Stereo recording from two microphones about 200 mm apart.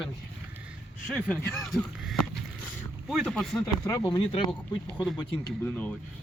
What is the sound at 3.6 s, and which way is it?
Speech, 15° left (ahead or behind).